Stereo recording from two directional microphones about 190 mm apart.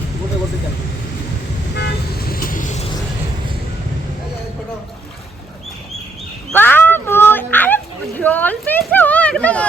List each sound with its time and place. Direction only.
1.7 s toot: 55° left (ahead or behind)
6.5 s dog: 10° left (ahead or behind)